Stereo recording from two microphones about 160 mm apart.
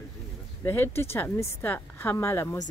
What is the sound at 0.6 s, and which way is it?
Speech, 15° left (ahead or behind).